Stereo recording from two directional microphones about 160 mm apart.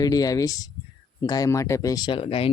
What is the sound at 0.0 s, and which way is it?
Speech, 25° left (ahead or behind).